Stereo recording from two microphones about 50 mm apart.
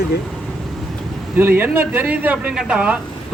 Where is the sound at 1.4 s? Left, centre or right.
Right.